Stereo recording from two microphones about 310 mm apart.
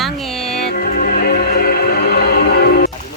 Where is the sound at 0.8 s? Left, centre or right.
Left.